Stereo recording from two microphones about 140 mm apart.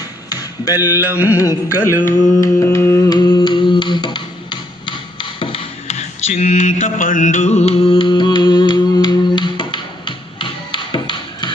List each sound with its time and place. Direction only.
0.3 s a sound: 25° left (ahead or behind)
0.9 s music: 10° right (ahead or behind)
1.3 s music: 20° left (ahead or behind)